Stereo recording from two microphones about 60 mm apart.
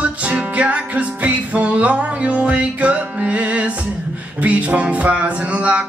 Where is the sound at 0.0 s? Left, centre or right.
Right.